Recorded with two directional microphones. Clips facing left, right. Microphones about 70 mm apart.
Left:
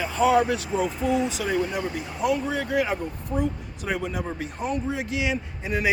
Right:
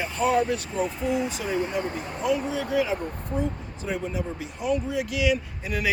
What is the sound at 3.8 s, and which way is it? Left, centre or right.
Speech, left.